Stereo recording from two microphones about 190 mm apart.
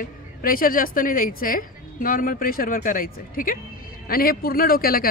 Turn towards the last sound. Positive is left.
turn(degrees=50)  # may be behind; listen again after turning